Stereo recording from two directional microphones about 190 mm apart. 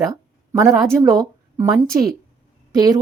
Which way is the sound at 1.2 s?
15° right (ahead or behind).